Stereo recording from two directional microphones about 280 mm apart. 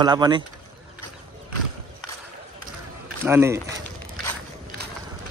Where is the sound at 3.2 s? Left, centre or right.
Centre.